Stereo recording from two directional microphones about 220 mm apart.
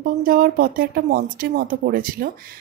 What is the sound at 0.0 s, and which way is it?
A woman's voice, 40° right (ahead or behind).